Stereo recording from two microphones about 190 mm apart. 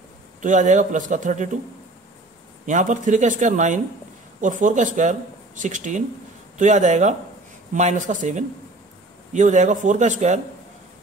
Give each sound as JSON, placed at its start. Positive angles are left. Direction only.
{"t": 0.4, "sound": "a man's voice", "side_deg": -40}
{"t": 2.6, "sound": "a man's voice", "side_deg": -40}